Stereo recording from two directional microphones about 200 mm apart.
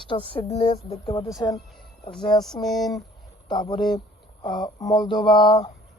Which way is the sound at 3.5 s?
20° left (ahead or behind).